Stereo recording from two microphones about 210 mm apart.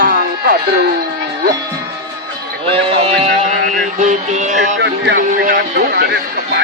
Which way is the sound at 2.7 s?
25° right (ahead or behind).